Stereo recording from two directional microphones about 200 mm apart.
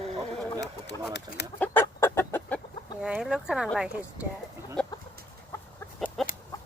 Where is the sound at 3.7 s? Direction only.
5° right (ahead or behind).